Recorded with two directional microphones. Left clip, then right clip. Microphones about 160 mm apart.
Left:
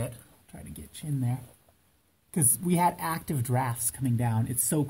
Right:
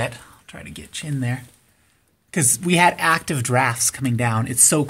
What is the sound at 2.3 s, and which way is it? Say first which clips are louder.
Speech: right 10 dB; 25° right (ahead or behind).